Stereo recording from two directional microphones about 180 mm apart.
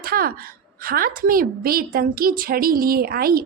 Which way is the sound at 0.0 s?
55° right (ahead or behind).